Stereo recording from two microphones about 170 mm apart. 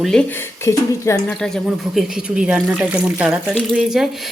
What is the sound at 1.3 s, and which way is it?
Speech, 5° left (ahead or behind).